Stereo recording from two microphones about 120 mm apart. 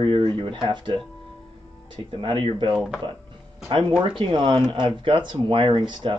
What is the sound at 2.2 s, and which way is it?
Speech, 45° right (ahead or behind).